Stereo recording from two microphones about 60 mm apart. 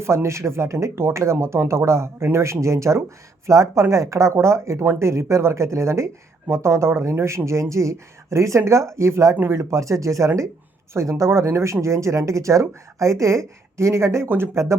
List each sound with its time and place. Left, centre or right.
0.0 s speech: right